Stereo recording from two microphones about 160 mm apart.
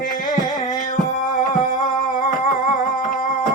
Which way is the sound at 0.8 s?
55° left (ahead or behind).